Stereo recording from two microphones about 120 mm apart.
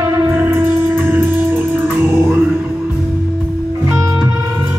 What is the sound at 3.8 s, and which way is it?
Music, 25° right (ahead or behind).